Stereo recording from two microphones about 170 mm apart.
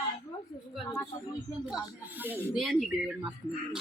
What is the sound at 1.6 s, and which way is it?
Speech, 10° right (ahead or behind).